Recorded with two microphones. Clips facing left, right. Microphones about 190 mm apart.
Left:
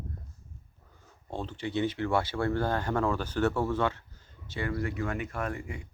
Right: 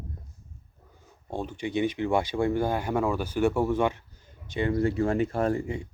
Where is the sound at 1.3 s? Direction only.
15° right (ahead or behind).